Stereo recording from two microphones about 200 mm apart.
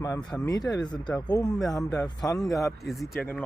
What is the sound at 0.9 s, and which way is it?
Speech, 5° left (ahead or behind).